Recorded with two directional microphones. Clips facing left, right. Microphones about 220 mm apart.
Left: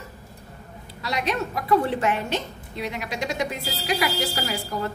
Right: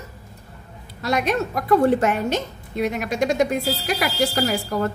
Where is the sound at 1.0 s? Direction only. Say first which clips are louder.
Right 5 dB; 50° right (ahead or behind).